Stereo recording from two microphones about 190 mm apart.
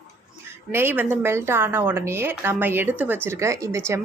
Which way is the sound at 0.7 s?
10° right (ahead or behind).